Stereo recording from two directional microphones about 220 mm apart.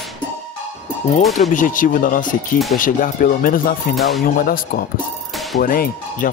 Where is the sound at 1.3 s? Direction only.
35° left (ahead or behind).